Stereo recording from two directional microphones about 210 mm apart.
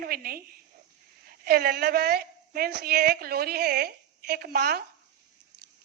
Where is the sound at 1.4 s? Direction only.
50° right (ahead or behind).